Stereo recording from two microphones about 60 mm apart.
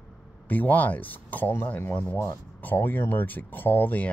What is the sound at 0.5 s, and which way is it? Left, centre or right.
Speech, left.